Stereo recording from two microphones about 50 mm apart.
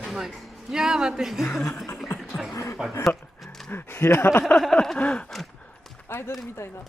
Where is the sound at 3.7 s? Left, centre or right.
Left.